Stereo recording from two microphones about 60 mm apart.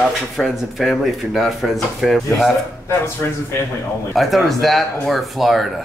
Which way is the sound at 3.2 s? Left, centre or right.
Left.